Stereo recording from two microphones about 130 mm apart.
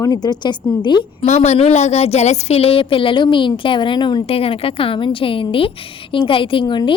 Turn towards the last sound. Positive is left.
turn(degrees=40)  # may be behind; listen again after turning